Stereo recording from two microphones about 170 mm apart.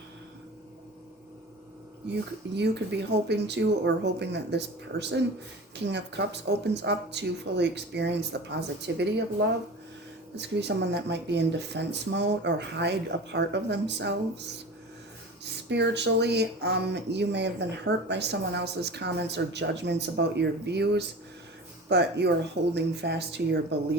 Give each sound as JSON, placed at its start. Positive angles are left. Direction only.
{"t": 2.6, "sound": "speech", "side_deg": -85}
{"t": 15.7, "sound": "speech", "side_deg": -90}